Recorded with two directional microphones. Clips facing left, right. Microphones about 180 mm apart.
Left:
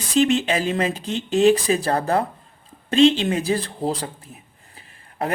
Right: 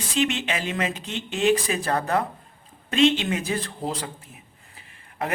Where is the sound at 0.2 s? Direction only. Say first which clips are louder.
Left 7 dB; 35° left (ahead or behind).